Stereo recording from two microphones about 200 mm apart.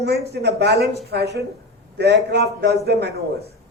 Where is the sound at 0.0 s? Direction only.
55° right (ahead or behind).